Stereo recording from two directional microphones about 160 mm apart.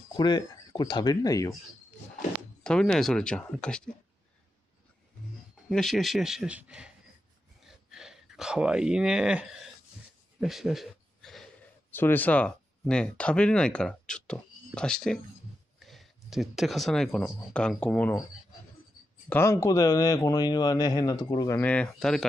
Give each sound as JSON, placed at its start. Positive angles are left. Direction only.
{"t": 0.1, "sound": "speech", "side_deg": 25}
{"t": 2.6, "sound": "speech", "side_deg": 5}
{"t": 5.7, "sound": "speech", "side_deg": 0}
{"t": 7.6, "sound": "a sound", "side_deg": -5}
{"t": 11.9, "sound": "speech", "side_deg": 10}
{"t": 19.2, "sound": "a man's voice", "side_deg": 15}
{"t": 21.5, "sound": "speech", "side_deg": 10}